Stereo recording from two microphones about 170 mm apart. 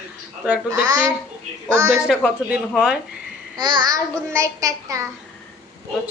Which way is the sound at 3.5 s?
25° right (ahead or behind).